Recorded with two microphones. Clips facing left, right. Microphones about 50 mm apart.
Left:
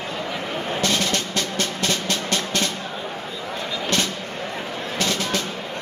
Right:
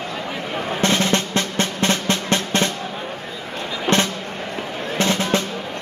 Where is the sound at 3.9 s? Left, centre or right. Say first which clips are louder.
Right 6 dB; right.